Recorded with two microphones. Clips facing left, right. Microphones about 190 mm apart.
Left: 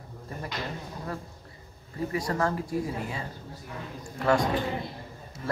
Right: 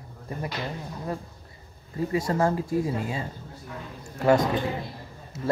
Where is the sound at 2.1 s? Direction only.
25° right (ahead or behind).